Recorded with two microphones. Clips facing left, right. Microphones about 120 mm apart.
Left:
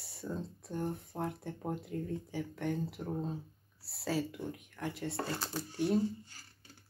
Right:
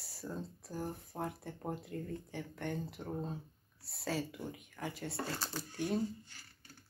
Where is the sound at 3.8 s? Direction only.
Centre (ahead or behind).